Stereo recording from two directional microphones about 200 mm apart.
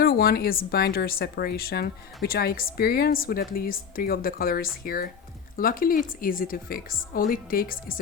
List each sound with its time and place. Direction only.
0.0 s speech: 50° left (ahead or behind)